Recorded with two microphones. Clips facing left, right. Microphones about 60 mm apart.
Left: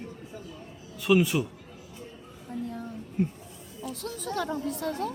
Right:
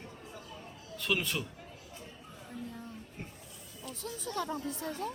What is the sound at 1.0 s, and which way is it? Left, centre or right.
Speech, centre.